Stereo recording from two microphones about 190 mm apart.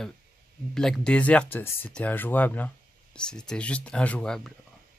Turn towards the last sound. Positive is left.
turn(degrees=5)  # may be behind; listen again after turning